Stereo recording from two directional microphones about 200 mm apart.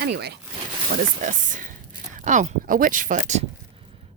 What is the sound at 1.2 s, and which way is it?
Speech, 40° right (ahead or behind).